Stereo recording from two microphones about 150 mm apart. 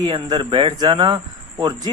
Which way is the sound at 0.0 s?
30° right (ahead or behind).